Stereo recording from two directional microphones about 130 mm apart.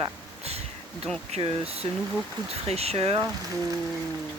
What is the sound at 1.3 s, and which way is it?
Speech, 45° right (ahead or behind).